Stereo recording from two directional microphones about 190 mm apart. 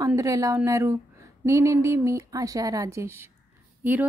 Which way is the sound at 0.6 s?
15° right (ahead or behind).